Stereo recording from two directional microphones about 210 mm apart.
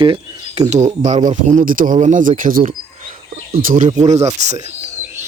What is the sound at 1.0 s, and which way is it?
Speech, 35° right (ahead or behind).